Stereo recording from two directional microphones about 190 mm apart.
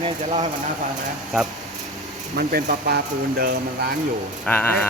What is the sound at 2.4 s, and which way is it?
Speech, 50° right (ahead or behind).